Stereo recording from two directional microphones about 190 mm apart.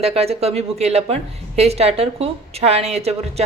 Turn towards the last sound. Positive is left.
turn(degrees=-35)  # may be behind; listen again after turning